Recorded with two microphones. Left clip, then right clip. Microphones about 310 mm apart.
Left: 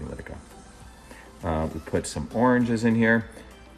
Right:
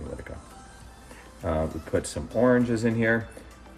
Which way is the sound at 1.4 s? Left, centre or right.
Left.